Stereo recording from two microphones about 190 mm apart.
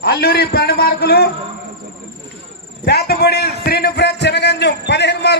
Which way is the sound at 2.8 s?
55° left (ahead or behind).